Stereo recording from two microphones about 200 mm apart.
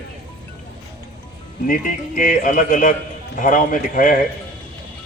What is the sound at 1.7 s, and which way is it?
A man's voice, 40° left (ahead or behind).